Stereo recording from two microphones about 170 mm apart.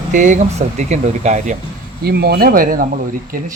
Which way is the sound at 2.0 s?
70° right (ahead or behind).